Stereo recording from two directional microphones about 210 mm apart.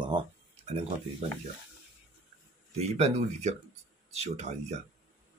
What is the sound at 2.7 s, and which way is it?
Speech, 30° right (ahead or behind).